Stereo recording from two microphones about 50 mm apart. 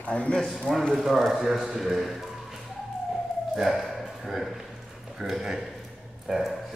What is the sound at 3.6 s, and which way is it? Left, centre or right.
A man's voice, centre.